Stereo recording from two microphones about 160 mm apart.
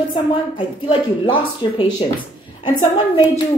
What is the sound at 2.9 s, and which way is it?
Speech, 30° left (ahead or behind).